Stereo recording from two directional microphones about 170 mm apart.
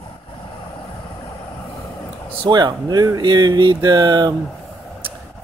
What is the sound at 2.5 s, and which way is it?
Speech, 25° right (ahead or behind).